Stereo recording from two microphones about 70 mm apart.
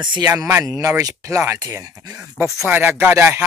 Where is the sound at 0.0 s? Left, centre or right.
Right.